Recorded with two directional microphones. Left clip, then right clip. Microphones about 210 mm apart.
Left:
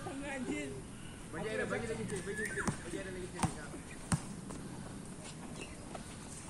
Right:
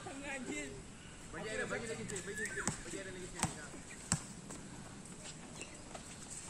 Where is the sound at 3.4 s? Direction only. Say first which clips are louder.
Left 2 dB; 20° right (ahead or behind).